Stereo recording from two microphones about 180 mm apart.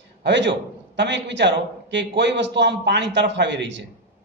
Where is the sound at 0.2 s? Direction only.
75° right (ahead or behind).